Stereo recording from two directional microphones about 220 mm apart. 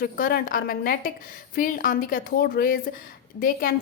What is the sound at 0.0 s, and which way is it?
A woman's voice, 40° left (ahead or behind).